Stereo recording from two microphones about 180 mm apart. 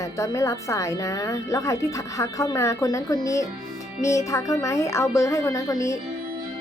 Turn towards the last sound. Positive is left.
turn(degrees=15)  # may be behind; listen again after turning